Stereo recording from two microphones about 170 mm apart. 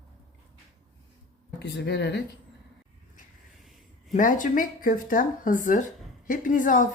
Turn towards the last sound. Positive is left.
turn(degrees=50)  # may be behind; listen again after turning